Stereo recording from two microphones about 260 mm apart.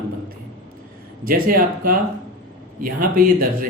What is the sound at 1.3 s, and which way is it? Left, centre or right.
Speech, right.